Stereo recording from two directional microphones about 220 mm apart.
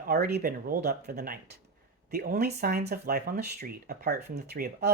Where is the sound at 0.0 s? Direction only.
40° right (ahead or behind).